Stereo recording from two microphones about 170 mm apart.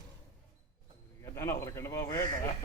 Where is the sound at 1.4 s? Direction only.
15° left (ahead or behind).